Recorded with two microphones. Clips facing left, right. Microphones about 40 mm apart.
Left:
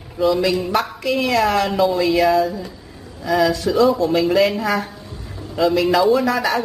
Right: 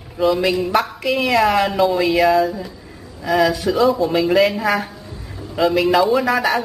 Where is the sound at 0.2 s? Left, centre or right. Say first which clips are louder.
Right 1 dB; centre.